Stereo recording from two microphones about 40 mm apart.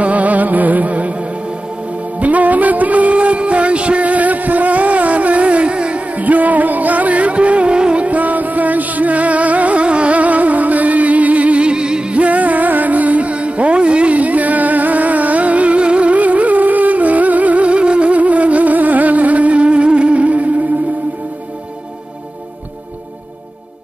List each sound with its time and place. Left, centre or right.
0.0 s music: right
2.1 s music: right
6.1 s music: right